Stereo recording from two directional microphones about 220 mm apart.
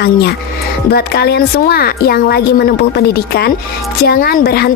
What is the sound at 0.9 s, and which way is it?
Speech, 45° left (ahead or behind).